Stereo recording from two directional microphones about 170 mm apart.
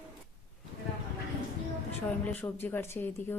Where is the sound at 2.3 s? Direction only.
10° left (ahead or behind).